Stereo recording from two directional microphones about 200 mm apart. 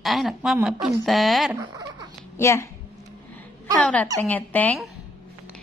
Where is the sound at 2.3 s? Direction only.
15° left (ahead or behind).